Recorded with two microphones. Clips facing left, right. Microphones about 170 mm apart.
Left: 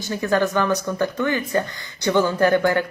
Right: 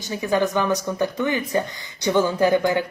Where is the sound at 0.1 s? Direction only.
15° right (ahead or behind).